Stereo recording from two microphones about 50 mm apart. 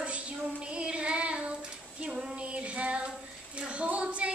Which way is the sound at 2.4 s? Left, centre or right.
Right.